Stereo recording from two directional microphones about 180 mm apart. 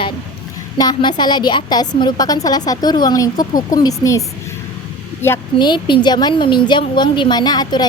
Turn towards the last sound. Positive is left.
turn(degrees=25)  # may be behind; listen again after turning